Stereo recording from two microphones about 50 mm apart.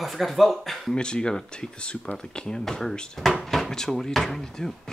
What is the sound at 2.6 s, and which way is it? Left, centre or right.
Speech, centre.